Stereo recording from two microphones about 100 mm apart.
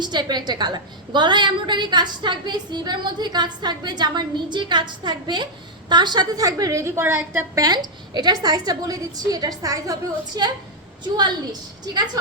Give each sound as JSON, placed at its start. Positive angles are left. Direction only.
{"t": 0.0, "sound": "a woman's voice", "side_deg": -45}